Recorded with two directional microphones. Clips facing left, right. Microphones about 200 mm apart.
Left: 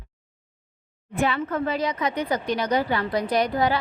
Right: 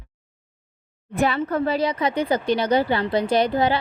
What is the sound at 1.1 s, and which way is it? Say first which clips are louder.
Speech: right 3 dB; 40° right (ahead or behind).